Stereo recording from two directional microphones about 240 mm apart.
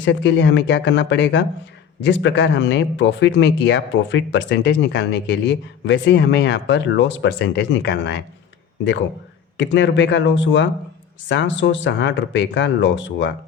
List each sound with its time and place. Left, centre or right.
0.0 s speech: left
9.6 s speech: left